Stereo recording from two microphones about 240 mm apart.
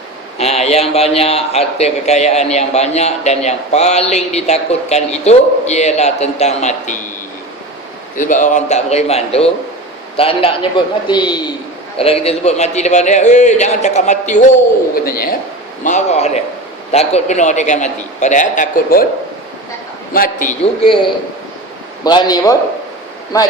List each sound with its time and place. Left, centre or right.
0.3 s a man's voice: left
8.1 s a man's voice: left
20.1 s a man's voice: left
22.0 s a man's voice: centre